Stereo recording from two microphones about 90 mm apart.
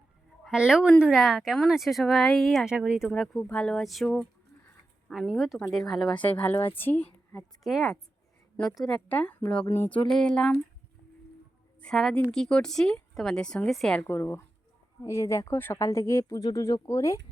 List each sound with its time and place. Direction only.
0.5 s speech: 10° right (ahead or behind)
2.7 s speech: 15° right (ahead or behind)
3.1 s a woman's voice: 5° left (ahead or behind)
6.1 s a woman's voice: 15° left (ahead or behind)
7.6 s speech: centre (ahead or behind)
9.0 s a woman's voice: 15° left (ahead or behind)
12.3 s a woman's voice: 10° left (ahead or behind)
14.1 s a woman's voice: 30° left (ahead or behind)
16.3 s speech: 45° left (ahead or behind)